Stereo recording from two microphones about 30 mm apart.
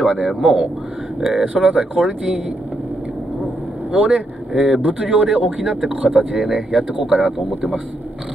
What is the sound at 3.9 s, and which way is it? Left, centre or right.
Speech, right.